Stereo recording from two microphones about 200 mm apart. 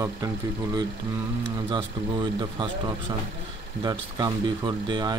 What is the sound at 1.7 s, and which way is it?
Speech, 25° right (ahead or behind).